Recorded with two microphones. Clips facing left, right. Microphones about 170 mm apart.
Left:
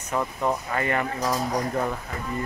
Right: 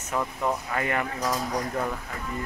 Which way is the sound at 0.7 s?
5° right (ahead or behind).